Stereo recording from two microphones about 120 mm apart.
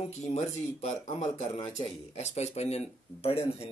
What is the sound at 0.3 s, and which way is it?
Speech, 65° left (ahead or behind).